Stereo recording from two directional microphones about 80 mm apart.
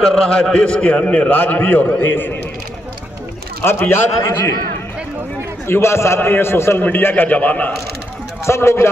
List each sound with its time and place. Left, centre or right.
0.1 s a man's voice: centre; by 2.3 s left
3.6 s a man's voice: left
5.7 s a man's voice: left
8.5 s a man's voice: left